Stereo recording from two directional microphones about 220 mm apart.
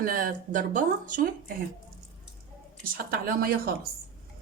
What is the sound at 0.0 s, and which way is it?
Speech, 40° right (ahead or behind).